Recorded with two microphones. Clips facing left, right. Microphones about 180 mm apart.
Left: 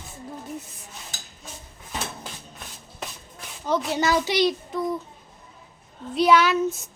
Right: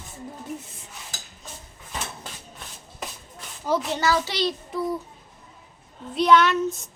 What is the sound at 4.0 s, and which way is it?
Speech, 15° left (ahead or behind).